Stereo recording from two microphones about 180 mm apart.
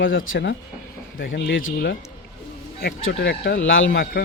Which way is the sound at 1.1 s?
60° left (ahead or behind).